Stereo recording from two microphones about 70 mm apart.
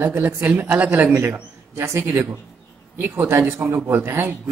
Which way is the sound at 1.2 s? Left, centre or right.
Right.